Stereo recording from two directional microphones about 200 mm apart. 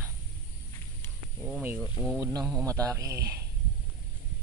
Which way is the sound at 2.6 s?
15° right (ahead or behind).